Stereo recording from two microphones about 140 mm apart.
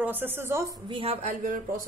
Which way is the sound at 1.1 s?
65° right (ahead or behind).